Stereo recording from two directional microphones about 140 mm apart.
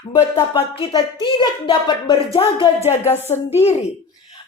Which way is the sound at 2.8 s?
50° left (ahead or behind).